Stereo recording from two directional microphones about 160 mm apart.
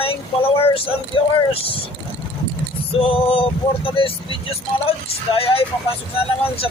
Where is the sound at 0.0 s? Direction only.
35° left (ahead or behind).